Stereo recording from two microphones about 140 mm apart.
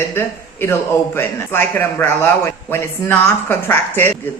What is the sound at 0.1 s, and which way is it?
A man's voice, 15° left (ahead or behind).